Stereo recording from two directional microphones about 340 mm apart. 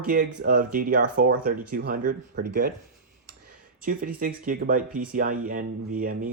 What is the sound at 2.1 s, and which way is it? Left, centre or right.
Speech, right.